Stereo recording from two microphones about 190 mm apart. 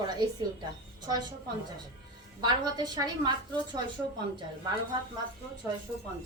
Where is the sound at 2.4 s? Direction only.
20° right (ahead or behind).